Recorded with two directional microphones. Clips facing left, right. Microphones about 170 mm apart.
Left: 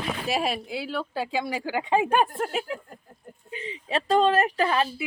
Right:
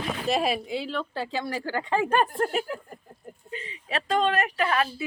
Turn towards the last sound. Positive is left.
turn(degrees=30)  # may be behind; listen again after turning